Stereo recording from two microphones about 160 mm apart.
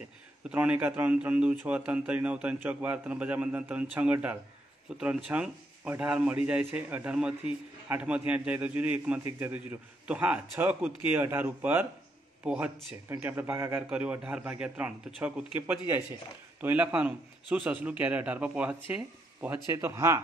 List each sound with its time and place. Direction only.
0.5 s a man's voice: 10° right (ahead or behind)